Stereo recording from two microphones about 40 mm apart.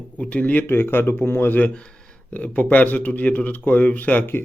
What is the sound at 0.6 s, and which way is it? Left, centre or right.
Speech, left.